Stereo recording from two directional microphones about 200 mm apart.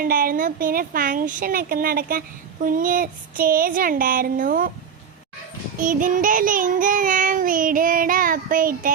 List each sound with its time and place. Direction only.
0.0 s child singing: 45° right (ahead or behind)
5.8 s child singing: 40° right (ahead or behind)